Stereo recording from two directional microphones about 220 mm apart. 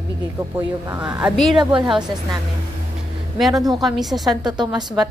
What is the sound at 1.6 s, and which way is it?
Speech, 20° right (ahead or behind).